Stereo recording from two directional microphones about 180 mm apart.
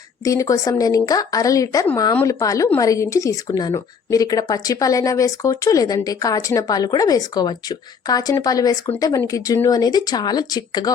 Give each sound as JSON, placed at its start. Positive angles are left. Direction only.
{"t": 0.3, "sound": "speech", "side_deg": 20}